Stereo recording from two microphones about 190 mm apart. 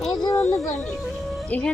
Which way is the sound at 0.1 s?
20° left (ahead or behind).